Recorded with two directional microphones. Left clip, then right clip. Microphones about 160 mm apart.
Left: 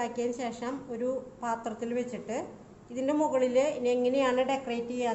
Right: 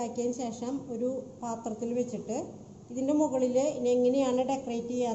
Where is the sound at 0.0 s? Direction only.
5° left (ahead or behind).